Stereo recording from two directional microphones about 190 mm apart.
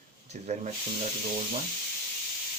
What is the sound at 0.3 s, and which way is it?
Speech, 35° right (ahead or behind).